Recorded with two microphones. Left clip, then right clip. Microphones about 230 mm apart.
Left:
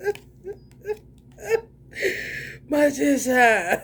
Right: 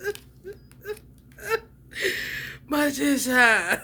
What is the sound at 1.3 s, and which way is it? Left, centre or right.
Whimper, centre.